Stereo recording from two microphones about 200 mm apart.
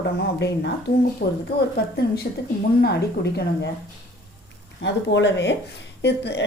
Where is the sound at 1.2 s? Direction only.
45° left (ahead or behind).